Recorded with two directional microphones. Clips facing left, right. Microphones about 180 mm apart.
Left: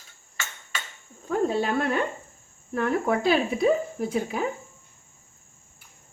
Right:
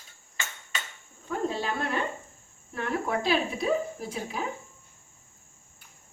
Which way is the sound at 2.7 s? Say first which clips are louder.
Left 5 dB; 50° left (ahead or behind).